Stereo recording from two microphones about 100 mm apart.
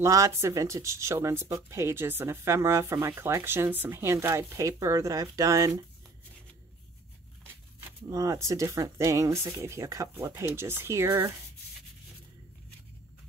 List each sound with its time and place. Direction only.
0.0 s speech: 30° right (ahead or behind)
8.1 s speech: 35° right (ahead or behind)